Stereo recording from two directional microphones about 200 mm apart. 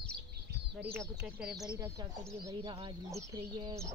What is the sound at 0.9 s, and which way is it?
Speech, 5° right (ahead or behind).